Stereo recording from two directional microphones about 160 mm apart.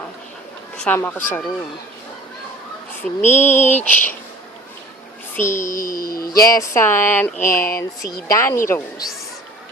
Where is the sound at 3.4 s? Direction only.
50° left (ahead or behind).